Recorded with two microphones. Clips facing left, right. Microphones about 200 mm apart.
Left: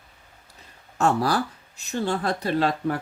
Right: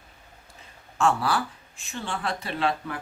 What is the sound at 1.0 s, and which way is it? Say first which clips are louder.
Speech: left 2 dB; 40° left (ahead or behind).